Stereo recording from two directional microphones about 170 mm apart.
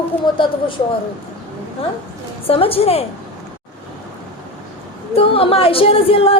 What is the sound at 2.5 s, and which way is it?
Speech, 35° left (ahead or behind).